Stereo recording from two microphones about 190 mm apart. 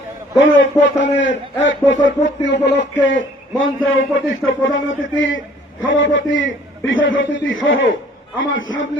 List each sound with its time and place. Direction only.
0.4 s a man's voice: 85° left